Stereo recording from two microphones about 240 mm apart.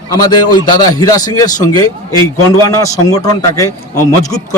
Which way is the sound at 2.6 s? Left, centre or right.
Centre.